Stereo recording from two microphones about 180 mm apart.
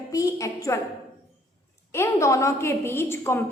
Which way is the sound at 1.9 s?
15° left (ahead or behind).